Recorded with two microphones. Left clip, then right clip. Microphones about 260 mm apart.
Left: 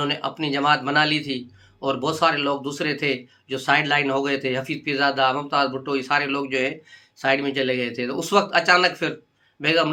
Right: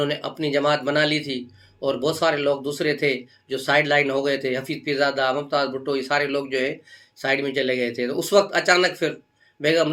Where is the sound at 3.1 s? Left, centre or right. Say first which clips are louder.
Right 1 dB; centre.